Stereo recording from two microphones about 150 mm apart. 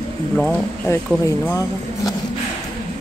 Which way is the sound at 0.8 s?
20° left (ahead or behind).